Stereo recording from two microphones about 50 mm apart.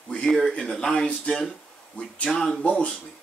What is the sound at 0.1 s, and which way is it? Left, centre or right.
Speech, centre.